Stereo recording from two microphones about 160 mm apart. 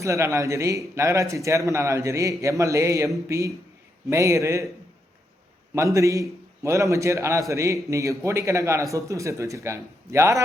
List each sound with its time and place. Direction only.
0.0 s a man's voice: 20° right (ahead or behind)
5.7 s speech: 20° right (ahead or behind)